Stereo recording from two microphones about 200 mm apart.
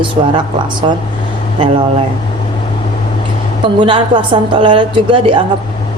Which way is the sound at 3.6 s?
25° right (ahead or behind).